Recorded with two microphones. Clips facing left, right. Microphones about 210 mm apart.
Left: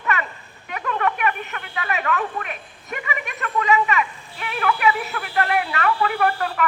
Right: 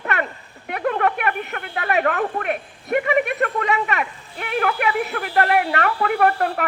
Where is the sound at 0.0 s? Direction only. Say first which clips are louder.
Right 1 dB; 55° right (ahead or behind).